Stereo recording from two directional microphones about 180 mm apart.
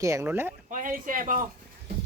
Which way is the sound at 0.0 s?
15° right (ahead or behind).